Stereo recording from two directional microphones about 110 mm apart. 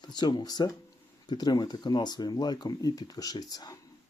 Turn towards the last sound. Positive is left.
turn(degrees=40)  # may be behind; listen again after turning